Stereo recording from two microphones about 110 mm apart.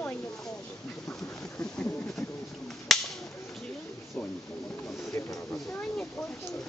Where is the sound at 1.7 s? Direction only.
10° left (ahead or behind).